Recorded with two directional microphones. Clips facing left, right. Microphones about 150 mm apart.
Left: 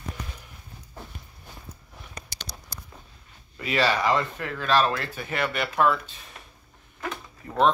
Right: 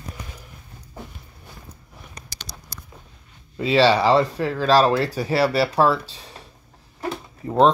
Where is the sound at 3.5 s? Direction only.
30° right (ahead or behind).